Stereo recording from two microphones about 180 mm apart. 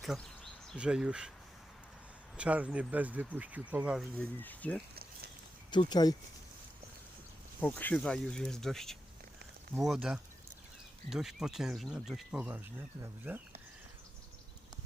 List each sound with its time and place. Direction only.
0.0 s speech: centre (ahead or behind)
2.3 s speech: 5° right (ahead or behind)
4.2 s speech: 10° left (ahead or behind)
5.7 s speech: 25° left (ahead or behind)
7.6 s speech: 10° left (ahead or behind); by 13.4 s 10° right (ahead or behind)